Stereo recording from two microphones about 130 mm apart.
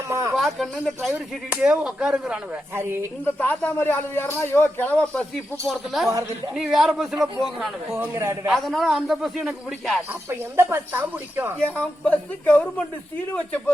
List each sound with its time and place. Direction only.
0.1 s a sound: 20° right (ahead or behind)
0.3 s speech: centre (ahead or behind)
2.7 s a man's voice: 20° right (ahead or behind)
3.2 s a man's voice: 15° left (ahead or behind)
5.6 s a man's voice: centre (ahead or behind)
7.9 s a man's voice: 20° right (ahead or behind)
8.4 s a man's voice: centre (ahead or behind)
10.1 s speech: 20° right (ahead or behind)
11.8 s a man's voice: 10° left (ahead or behind)